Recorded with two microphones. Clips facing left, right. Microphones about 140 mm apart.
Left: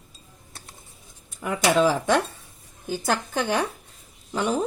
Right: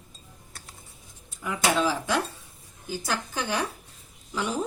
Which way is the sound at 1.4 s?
50° left (ahead or behind).